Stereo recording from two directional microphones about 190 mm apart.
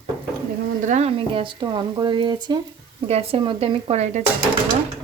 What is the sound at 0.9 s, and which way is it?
Speech, 35° right (ahead or behind).